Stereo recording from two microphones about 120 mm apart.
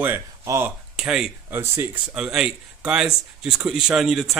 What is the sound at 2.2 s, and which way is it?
Speech, 5° right (ahead or behind).